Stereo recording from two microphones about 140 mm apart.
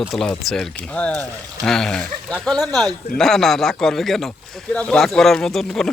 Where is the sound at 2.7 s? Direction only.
25° right (ahead or behind).